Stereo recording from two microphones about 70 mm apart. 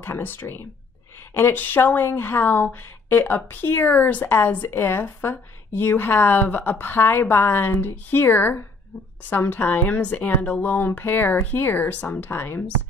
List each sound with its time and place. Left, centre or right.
0.0 s a woman's voice: left